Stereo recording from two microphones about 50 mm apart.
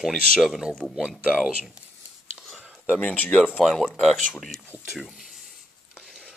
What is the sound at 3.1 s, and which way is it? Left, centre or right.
Speech, left.